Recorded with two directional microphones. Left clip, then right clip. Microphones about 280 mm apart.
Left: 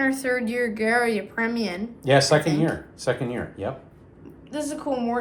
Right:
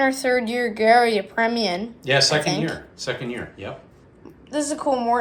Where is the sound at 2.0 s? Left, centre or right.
Centre.